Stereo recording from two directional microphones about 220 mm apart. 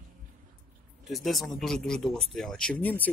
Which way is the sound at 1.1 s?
Centre (ahead or behind).